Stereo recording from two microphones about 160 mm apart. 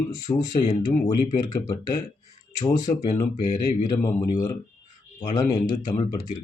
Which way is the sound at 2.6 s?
20° left (ahead or behind).